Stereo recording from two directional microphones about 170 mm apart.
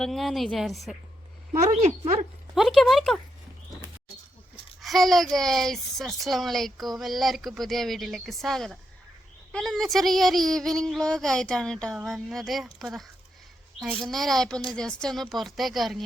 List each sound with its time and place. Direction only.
0.0 s speech: centre (ahead or behind)
1.6 s a woman's voice: 40° right (ahead or behind)
2.6 s speech: centre (ahead or behind)
4.8 s speech: centre (ahead or behind)